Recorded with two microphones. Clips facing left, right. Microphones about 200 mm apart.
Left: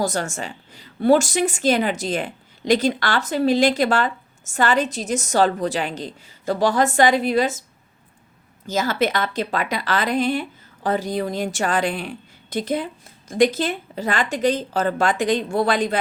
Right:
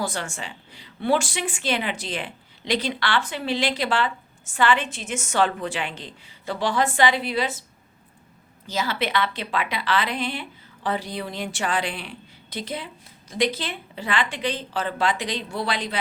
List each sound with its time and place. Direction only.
0.0 s a woman's voice: 40° left (ahead or behind)
8.6 s a woman's voice: 45° left (ahead or behind)